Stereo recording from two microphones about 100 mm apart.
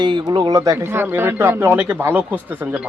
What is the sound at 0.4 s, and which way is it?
Speech, 35° right (ahead or behind).